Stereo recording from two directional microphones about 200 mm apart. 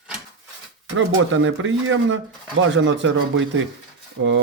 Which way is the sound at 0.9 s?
70° right (ahead or behind).